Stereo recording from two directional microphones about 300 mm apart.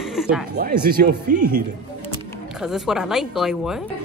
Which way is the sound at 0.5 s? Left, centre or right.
Right.